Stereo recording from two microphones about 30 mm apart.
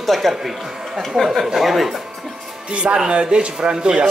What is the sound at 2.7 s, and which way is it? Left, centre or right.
A man's voice, right.